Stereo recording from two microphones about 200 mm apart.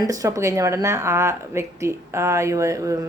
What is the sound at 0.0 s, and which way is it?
Speech, 15° right (ahead or behind).